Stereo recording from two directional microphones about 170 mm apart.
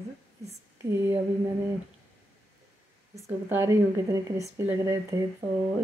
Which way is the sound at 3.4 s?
10° right (ahead or behind).